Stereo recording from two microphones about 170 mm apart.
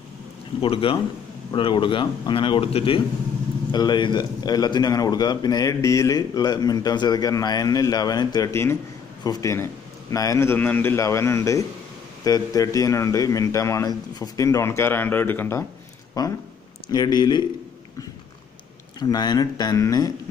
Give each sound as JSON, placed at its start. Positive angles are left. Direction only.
{"t": 0.6, "sound": "a man's voice", "side_deg": 30}
{"t": 16.2, "sound": "a man's voice", "side_deg": 25}
{"t": 18.9, "sound": "a man's voice", "side_deg": 25}